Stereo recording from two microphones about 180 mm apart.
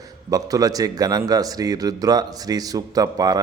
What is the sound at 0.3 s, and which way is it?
A man's voice, 20° right (ahead or behind).